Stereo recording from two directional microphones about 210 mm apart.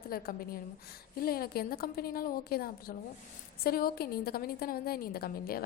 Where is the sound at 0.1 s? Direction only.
45° left (ahead or behind).